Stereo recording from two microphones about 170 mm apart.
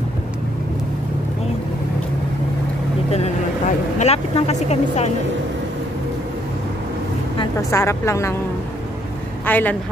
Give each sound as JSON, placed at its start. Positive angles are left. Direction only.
{"t": 3.1, "sound": "speech", "side_deg": 40}
{"t": 7.7, "sound": "a woman's voice", "side_deg": 15}
{"t": 9.5, "sound": "a woman's voice", "side_deg": 10}